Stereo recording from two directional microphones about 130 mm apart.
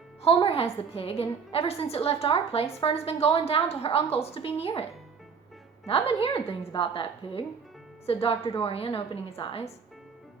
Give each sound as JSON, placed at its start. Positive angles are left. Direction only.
{"t": 0.2, "sound": "a woman's voice", "side_deg": 45}